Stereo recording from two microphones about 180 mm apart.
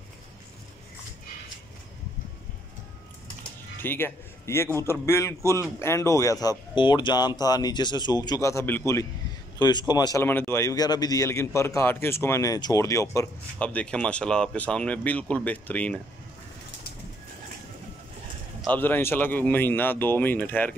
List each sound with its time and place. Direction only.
3.8 s a man's voice: 10° left (ahead or behind)
18.7 s a man's voice: 10° left (ahead or behind)